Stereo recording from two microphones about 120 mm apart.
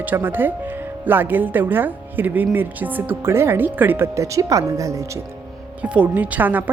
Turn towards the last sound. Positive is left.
turn(degrees=-15)  # may be behind; listen again after turning